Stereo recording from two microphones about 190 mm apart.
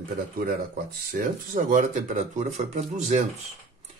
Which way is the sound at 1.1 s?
50° right (ahead or behind).